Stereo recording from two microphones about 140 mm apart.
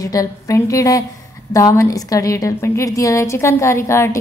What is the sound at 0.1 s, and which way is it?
A woman's voice, 25° left (ahead or behind).